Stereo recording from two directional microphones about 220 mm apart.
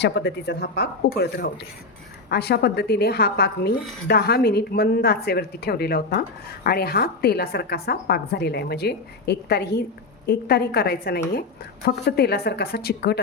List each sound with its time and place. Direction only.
0.0 s a woman's voice: 50° left (ahead or behind)